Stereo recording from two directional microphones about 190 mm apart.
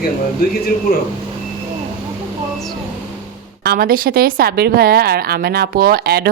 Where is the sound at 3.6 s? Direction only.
50° right (ahead or behind).